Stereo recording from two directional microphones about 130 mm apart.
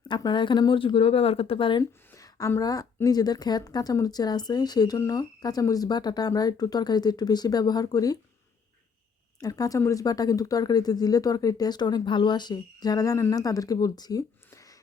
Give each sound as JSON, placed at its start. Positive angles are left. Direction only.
{"t": 0.1, "sound": "a woman's voice", "side_deg": 35}
{"t": 1.8, "sound": "a woman's voice", "side_deg": 25}
{"t": 9.4, "sound": "speech", "side_deg": 30}